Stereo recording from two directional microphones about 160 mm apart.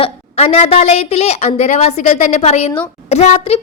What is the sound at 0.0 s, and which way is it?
A woman's voice, 40° left (ahead or behind).